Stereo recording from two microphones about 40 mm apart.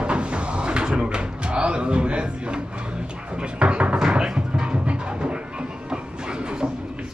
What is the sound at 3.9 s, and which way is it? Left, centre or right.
Music, centre.